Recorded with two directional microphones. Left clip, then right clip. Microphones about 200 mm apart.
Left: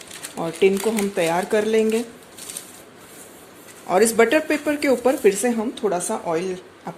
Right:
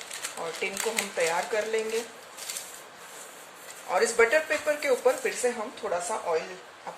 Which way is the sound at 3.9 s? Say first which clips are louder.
Left 6 dB; 50° left (ahead or behind).